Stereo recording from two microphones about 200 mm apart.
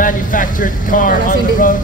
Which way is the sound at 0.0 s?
40° left (ahead or behind).